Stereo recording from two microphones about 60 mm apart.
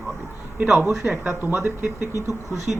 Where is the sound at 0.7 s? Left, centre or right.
Centre.